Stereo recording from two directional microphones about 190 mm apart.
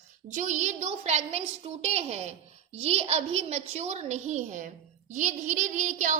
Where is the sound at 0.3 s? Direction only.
40° right (ahead or behind).